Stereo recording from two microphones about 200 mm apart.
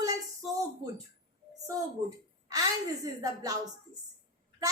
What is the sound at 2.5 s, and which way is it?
A woman's voice, 15° right (ahead or behind).